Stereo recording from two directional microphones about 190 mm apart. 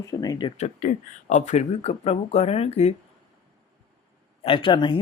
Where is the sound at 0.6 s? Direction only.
40° left (ahead or behind).